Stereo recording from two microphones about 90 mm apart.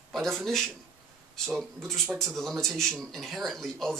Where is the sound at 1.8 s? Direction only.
5° left (ahead or behind).